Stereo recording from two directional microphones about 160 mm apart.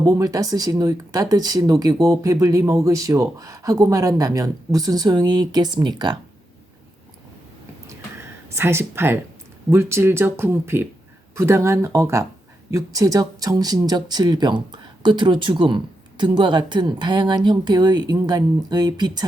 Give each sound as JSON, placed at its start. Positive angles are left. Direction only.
{"t": 0.0, "sound": "speech", "side_deg": -25}
{"t": 7.9, "sound": "a sound", "side_deg": -15}
{"t": 9.6, "sound": "speech", "side_deg": -15}